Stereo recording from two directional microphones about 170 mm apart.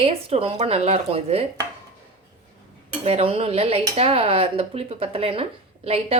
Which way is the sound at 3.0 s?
35° right (ahead or behind).